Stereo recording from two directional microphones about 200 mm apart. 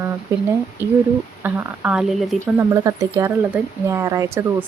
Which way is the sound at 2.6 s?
15° right (ahead or behind).